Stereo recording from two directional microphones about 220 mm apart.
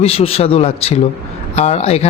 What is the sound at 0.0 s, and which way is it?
Speech, 25° left (ahead or behind).